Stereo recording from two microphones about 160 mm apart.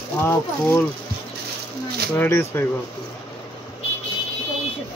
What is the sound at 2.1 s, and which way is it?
Speech, 15° left (ahead or behind).